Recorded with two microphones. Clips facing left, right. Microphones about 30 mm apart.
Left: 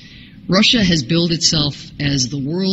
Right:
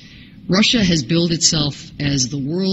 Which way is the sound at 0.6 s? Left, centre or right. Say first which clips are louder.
Left 1 dB; left.